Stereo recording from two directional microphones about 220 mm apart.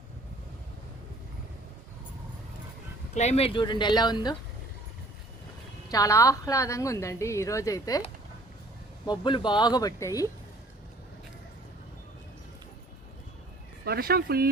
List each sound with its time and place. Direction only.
3.2 s speech: 30° left (ahead or behind)
5.9 s a woman's voice: 15° left (ahead or behind)
13.8 s speech: 45° right (ahead or behind)